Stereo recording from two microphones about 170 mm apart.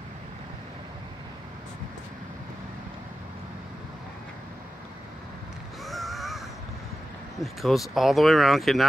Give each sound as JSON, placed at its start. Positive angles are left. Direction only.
{"t": 5.9, "sound": "crow", "side_deg": 0}
{"t": 7.4, "sound": "speech", "side_deg": 0}